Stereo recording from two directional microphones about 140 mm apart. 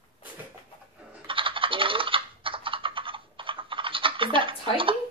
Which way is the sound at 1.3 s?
40° right (ahead or behind).